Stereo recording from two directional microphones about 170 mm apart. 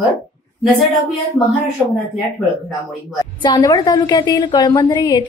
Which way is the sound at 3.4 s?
25° left (ahead or behind).